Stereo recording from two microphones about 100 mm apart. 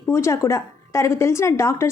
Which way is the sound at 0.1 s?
30° left (ahead or behind).